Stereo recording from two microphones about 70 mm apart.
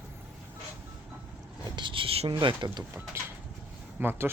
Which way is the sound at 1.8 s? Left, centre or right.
Right.